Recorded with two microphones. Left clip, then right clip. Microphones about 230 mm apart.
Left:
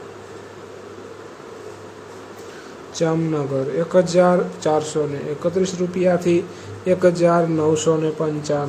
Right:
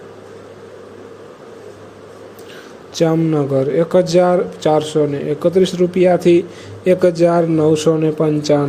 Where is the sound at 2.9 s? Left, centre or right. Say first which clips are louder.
Right 6 dB; centre.